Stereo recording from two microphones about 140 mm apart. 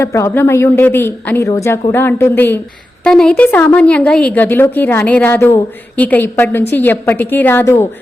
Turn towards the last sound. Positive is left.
turn(degrees=20)  # may be behind; listen again after turning